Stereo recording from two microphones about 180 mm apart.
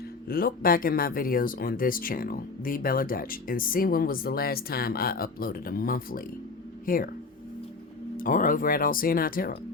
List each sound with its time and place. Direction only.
0.3 s speech: 55° left (ahead or behind)
8.1 s speech: 50° left (ahead or behind)